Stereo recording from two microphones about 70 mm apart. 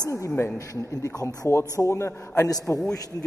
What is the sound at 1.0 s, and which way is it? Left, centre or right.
A man's voice, left.